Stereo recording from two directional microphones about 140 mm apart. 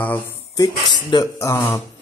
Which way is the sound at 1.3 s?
20° left (ahead or behind).